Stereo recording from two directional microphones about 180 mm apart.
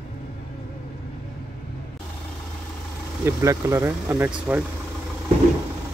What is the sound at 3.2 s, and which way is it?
Speech, 15° right (ahead or behind).